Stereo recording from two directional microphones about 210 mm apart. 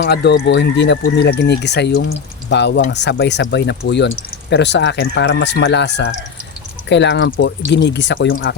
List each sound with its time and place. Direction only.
0.0 s speech: 50° left (ahead or behind)